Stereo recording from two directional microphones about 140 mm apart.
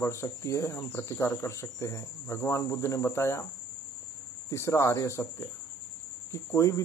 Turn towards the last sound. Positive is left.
turn(degrees=20)  # may be behind; listen again after turning